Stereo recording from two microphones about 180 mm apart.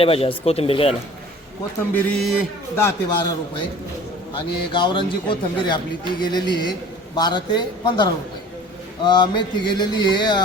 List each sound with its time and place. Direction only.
0.0 s speech: 30° left (ahead or behind)
1.9 s a man's voice: centre (ahead or behind)
2.7 s speech: 15° left (ahead or behind)
4.4 s a man's voice: 25° left (ahead or behind)